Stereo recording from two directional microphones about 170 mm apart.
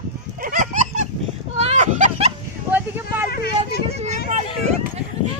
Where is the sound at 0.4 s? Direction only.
55° right (ahead or behind).